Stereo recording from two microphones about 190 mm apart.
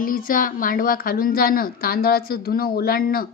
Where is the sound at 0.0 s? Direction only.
45° left (ahead or behind).